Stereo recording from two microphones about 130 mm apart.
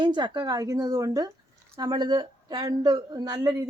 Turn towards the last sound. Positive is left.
turn(degrees=-25)  # may be behind; listen again after turning